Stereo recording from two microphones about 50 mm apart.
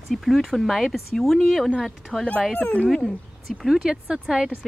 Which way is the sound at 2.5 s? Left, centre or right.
Left.